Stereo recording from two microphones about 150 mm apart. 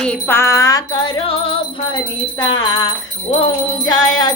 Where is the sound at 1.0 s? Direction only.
35° left (ahead or behind).